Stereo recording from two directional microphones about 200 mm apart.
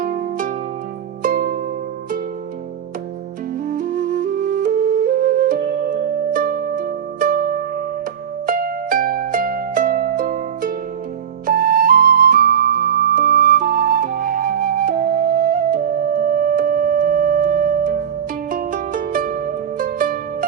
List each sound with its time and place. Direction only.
0.0 s music: 45° right (ahead or behind)
3.7 s music: 45° right (ahead or behind)
8.4 s music: 45° right (ahead or behind)